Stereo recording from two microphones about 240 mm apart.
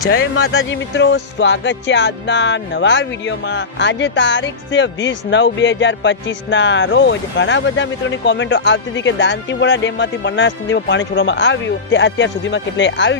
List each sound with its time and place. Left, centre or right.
0.3 s music: left